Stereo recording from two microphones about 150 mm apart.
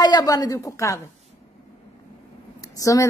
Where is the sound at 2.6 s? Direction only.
20° left (ahead or behind).